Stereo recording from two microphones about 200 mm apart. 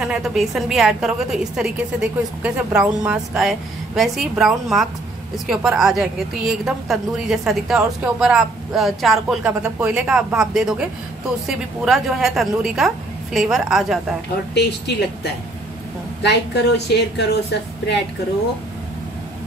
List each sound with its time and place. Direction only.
0.0 s a woman's voice: 5° right (ahead or behind)
14.5 s a woman's voice: 55° left (ahead or behind)
16.2 s a woman's voice: 60° left (ahead or behind)